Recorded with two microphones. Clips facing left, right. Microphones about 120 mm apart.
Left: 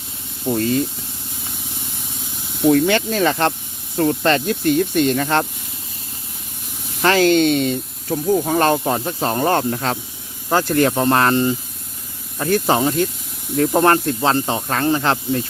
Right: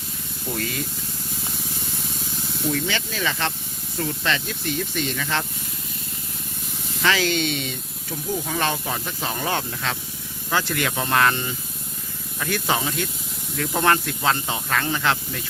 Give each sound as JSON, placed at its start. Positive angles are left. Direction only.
{"t": 0.4, "sound": "speech", "side_deg": 25}
{"t": 2.6, "sound": "speech", "side_deg": 55}
{"t": 7.0, "sound": "speech", "side_deg": 45}